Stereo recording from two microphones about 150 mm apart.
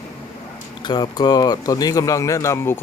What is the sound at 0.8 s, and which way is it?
Speech, 30° left (ahead or behind).